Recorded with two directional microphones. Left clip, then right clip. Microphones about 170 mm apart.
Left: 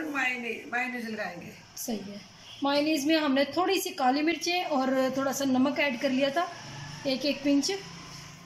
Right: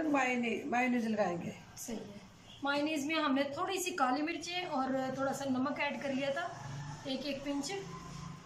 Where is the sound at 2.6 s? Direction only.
40° left (ahead or behind).